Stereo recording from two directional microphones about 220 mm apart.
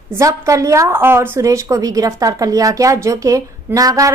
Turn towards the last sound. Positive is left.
turn(degrees=-15)  # may be behind; listen again after turning